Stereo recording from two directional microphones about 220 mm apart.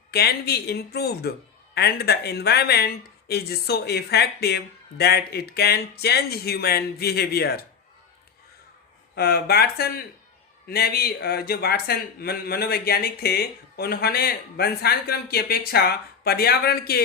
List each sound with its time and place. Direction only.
0.1 s a man's voice: 45° left (ahead or behind)
9.1 s a man's voice: 45° left (ahead or behind)